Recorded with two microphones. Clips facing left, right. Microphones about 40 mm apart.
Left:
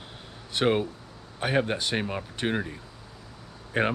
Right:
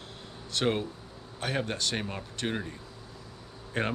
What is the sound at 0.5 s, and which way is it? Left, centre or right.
Speech, centre.